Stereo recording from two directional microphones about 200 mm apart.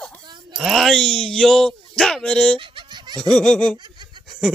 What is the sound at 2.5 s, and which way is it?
Baby laughter, 25° right (ahead or behind).